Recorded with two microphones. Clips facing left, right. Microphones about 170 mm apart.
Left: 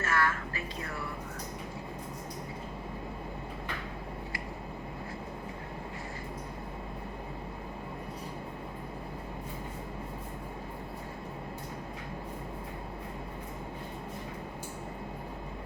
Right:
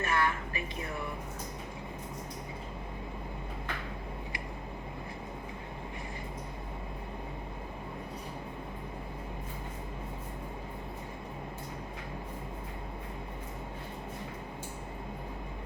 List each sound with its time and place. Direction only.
0.0 s music: 20° right (ahead or behind)